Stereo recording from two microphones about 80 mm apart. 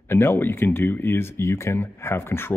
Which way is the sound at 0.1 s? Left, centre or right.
Left.